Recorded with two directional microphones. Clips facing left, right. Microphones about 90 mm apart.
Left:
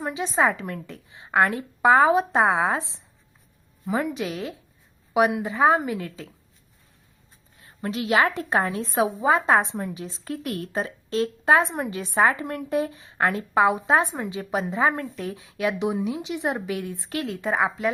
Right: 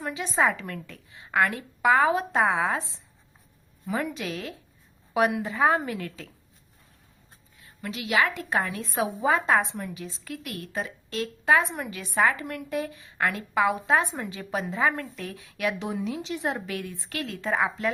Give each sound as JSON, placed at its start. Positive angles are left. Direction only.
{"t": 0.0, "sound": "a woman's voice", "side_deg": 20}
{"t": 7.6, "sound": "a woman's voice", "side_deg": 35}